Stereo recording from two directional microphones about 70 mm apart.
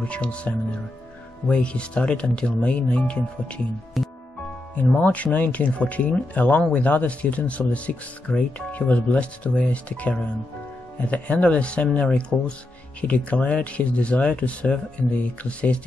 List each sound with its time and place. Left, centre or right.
0.0 s speech: centre
4.0 s music: centre
4.7 s speech: left